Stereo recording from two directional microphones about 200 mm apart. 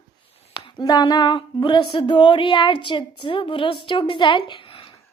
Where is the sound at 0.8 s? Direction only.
20° left (ahead or behind).